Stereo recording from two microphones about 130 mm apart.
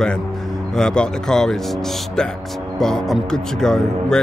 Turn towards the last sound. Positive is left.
turn(degrees=5)  # may be behind; listen again after turning